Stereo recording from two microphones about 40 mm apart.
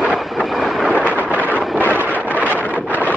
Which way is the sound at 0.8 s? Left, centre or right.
Left.